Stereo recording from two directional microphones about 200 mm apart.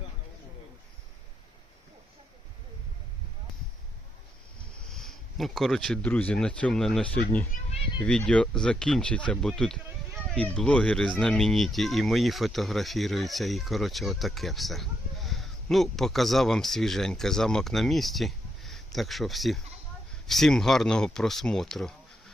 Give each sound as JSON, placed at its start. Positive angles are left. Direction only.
{"t": 4.9, "sound": "speech", "side_deg": 0}
{"t": 7.5, "sound": "a sound", "side_deg": 40}
{"t": 8.0, "sound": "speech", "side_deg": 5}